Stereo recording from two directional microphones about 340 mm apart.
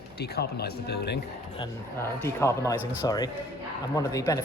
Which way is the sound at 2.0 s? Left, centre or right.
Centre.